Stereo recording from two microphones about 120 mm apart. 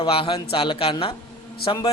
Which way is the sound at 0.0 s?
50° left (ahead or behind).